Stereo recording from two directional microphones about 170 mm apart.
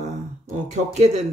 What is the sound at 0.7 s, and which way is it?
Speech, 40° right (ahead or behind).